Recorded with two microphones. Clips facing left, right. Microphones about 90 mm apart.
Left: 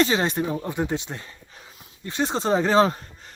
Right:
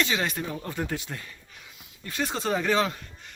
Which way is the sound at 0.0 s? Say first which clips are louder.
Left 6 dB; 30° left (ahead or behind).